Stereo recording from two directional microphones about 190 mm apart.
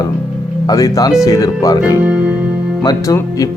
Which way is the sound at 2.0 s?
5° right (ahead or behind).